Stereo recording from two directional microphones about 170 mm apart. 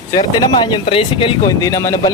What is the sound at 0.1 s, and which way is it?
Speech, 25° left (ahead or behind).